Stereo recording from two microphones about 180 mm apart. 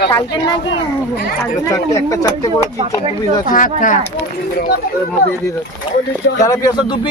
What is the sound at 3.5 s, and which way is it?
Speech, 45° left (ahead or behind).